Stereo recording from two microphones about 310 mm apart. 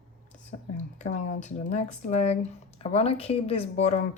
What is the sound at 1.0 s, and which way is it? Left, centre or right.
Speech, left.